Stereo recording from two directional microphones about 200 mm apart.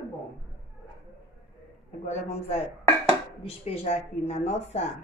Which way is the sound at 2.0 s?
35° left (ahead or behind).